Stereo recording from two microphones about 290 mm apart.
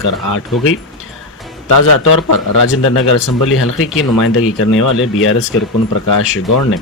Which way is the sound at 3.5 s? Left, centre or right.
Left.